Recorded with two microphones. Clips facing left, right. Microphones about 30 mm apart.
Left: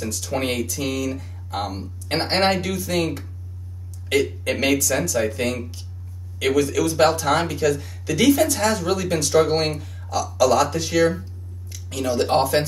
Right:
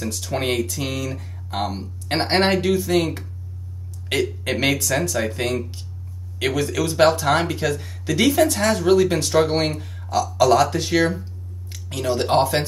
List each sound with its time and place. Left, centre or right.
0.0 s speech: centre
4.1 s speech: centre
11.7 s a sound: right
12.3 s speech: centre